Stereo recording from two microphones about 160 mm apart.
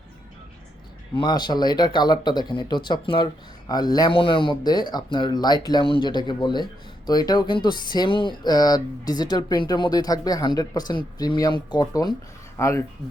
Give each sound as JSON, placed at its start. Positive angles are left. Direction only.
{"t": 1.1, "sound": "speech", "side_deg": 30}